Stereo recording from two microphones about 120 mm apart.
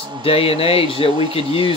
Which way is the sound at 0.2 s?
50° left (ahead or behind).